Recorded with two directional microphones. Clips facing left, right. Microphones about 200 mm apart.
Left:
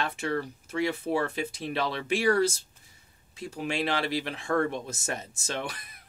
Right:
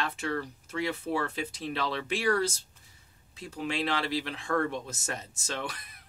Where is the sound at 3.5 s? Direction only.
15° left (ahead or behind).